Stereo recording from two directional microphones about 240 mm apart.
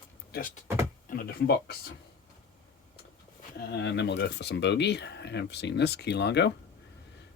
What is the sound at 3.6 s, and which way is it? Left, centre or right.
Speech, left.